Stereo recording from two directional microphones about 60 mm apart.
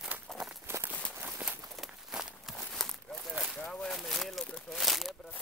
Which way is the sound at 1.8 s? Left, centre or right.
Centre.